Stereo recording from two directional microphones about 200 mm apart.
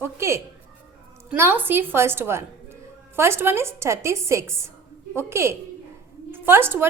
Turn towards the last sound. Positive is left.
turn(degrees=-10)  # may be behind; listen again after turning